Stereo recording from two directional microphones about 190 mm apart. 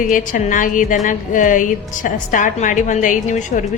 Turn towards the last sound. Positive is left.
turn(degrees=40)  # may be behind; listen again after turning